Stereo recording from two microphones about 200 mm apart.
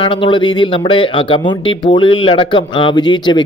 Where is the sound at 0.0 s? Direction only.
25° left (ahead or behind).